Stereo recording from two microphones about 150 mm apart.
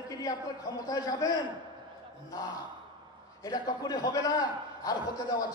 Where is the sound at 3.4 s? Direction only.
25° left (ahead or behind).